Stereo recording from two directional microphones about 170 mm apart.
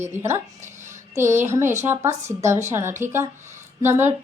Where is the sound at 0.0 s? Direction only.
15° right (ahead or behind).